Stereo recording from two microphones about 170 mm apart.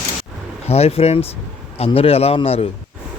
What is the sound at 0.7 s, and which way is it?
A man's voice, 35° left (ahead or behind).